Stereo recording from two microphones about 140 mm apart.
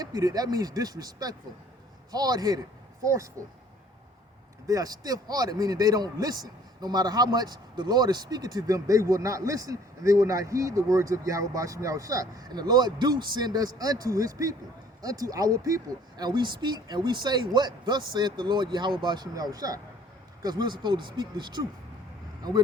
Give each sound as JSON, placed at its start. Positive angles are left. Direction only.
{"t": 0.0, "sound": "a man's voice", "side_deg": -25}
{"t": 4.6, "sound": "a man's voice", "side_deg": -25}